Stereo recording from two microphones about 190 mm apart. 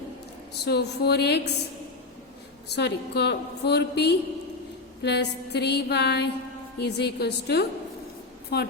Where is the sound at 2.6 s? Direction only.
60° left (ahead or behind).